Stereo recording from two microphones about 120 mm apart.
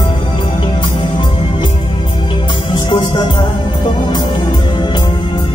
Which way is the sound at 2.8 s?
40° left (ahead or behind).